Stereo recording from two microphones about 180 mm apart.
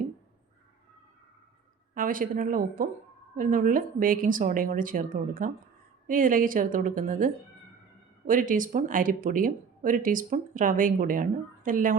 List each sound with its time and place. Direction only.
2.0 s speech: 50° right (ahead or behind)
8.3 s speech: 50° right (ahead or behind)